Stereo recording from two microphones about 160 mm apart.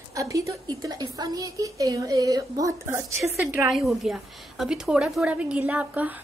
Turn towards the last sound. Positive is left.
turn(degrees=-10)  # may be behind; listen again after turning